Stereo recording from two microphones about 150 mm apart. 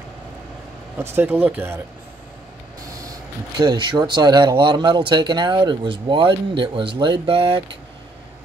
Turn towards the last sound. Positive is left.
turn(degrees=-35)  # may be behind; listen again after turning